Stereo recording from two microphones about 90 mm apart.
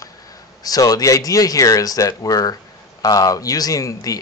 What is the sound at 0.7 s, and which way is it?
Speech, 45° left (ahead or behind).